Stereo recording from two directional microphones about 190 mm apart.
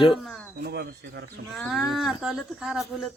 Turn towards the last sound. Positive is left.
turn(degrees=0)  # may be behind; listen again after turning